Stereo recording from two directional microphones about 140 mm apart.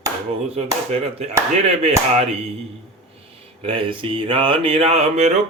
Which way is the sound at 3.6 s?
40° right (ahead or behind).